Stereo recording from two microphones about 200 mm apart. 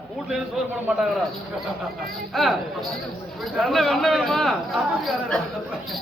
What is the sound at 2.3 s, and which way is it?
Speech, centre (ahead or behind).